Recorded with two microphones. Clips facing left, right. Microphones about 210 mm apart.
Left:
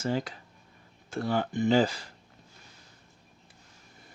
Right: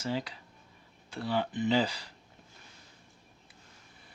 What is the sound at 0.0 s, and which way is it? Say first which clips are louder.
Speech: left 4 dB; 45° left (ahead or behind).